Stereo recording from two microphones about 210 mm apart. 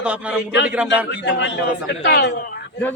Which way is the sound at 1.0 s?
60° left (ahead or behind).